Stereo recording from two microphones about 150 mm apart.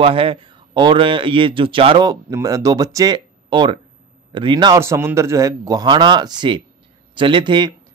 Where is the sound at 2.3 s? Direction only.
20° right (ahead or behind).